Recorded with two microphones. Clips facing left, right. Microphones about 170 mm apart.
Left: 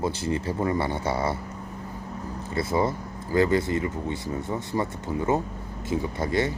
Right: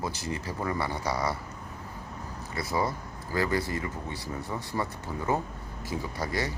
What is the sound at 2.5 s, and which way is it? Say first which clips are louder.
Speech: left 5 dB; 25° left (ahead or behind).